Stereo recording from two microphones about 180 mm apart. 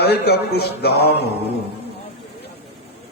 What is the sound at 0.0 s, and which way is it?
A man's voice, 65° left (ahead or behind).